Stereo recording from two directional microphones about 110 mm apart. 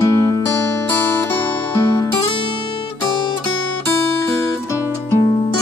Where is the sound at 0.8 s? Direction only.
15° left (ahead or behind).